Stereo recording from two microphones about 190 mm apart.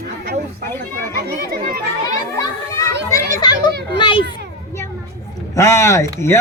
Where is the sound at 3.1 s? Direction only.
15° left (ahead or behind).